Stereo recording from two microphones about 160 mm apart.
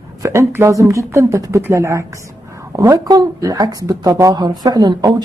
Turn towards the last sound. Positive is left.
turn(degrees=-25)  # may be behind; listen again after turning